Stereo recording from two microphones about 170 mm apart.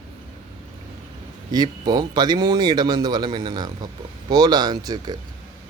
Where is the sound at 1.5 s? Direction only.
25° right (ahead or behind).